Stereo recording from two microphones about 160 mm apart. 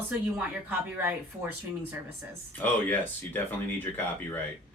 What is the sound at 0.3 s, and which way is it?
Speech, 10° right (ahead or behind).